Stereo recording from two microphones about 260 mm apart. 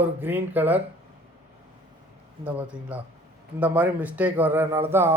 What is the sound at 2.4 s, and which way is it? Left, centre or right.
Speech, centre.